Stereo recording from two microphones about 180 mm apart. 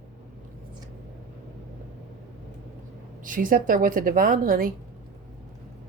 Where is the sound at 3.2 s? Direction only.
50° right (ahead or behind).